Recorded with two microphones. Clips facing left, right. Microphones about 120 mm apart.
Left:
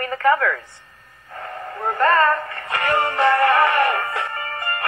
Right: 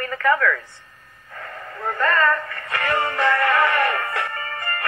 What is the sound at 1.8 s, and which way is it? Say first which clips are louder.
Speech: left 3 dB; 35° left (ahead or behind).